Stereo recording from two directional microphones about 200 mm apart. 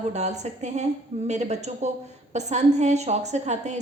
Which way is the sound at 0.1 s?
35° right (ahead or behind).